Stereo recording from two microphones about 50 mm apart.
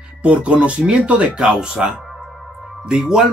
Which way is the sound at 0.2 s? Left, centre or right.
Right.